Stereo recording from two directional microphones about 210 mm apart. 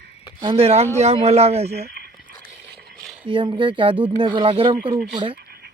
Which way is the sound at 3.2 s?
25° right (ahead or behind).